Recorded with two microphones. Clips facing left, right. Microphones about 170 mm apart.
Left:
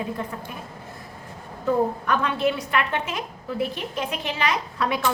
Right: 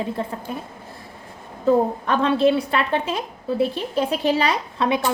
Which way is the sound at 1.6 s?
30° right (ahead or behind).